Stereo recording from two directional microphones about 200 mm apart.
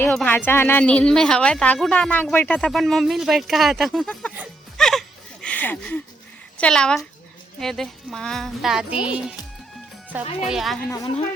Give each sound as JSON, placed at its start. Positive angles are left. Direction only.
{"t": 0.0, "sound": "speech", "side_deg": 10}
{"t": 10.4, "sound": "speech", "side_deg": 0}
{"t": 10.8, "sound": "a woman's voice", "side_deg": 15}